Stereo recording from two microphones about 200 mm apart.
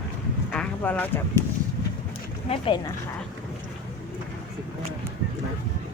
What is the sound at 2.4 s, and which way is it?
Speech, 25° left (ahead or behind).